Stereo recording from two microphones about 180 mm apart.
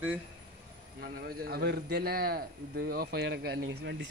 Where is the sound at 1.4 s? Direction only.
65° right (ahead or behind).